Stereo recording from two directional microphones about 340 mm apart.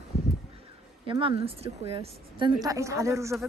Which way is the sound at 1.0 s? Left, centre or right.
Centre.